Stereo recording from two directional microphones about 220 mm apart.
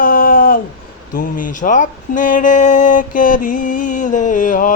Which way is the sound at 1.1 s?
40° left (ahead or behind).